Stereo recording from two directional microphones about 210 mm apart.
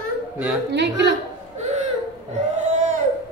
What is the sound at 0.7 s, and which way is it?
Speech, 55° right (ahead or behind).